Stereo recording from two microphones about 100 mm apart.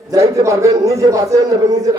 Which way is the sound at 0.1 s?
30° right (ahead or behind).